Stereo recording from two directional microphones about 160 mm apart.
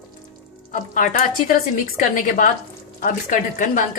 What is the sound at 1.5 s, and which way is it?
A woman's voice, 55° left (ahead or behind).